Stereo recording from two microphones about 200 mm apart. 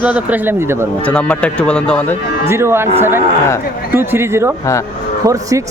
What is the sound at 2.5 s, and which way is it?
Speech, 15° right (ahead or behind).